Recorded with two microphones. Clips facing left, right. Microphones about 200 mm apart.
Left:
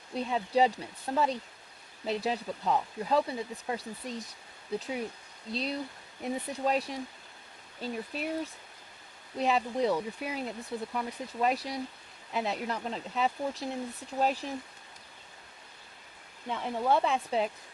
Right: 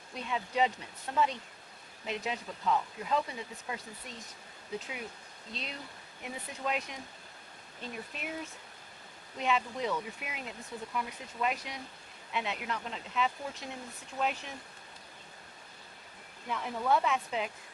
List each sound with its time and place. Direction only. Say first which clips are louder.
0.1 s speech: left 6 dB; 35° left (ahead or behind)
9.4 s speech: left 4 dB; 35° left (ahead or behind)
16.5 s speech: left 2 dB; 30° left (ahead or behind)